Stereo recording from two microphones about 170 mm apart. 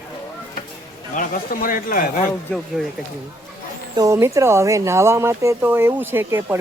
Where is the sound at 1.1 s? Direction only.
55° left (ahead or behind).